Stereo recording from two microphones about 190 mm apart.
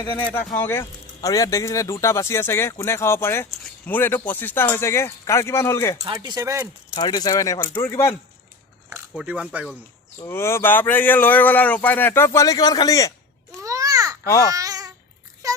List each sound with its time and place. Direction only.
0.2 s speech: 10° left (ahead or behind)
6.1 s speech: 20° right (ahead or behind)
6.9 s speech: 20° left (ahead or behind)
9.1 s speech: 5° right (ahead or behind)
10.2 s speech: 15° left (ahead or behind)
13.6 s babbling: 15° right (ahead or behind)
15.4 s a sound: 15° right (ahead or behind)